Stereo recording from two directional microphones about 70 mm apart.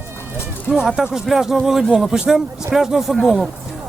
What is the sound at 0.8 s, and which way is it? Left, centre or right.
Speech, centre.